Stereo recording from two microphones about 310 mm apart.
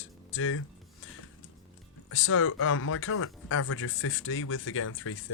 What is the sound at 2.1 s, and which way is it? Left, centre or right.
Speech, left.